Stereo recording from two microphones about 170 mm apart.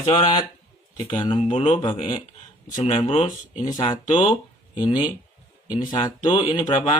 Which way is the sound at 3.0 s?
40° left (ahead or behind).